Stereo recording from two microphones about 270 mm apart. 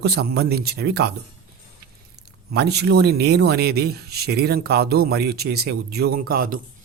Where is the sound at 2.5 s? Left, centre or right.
Right.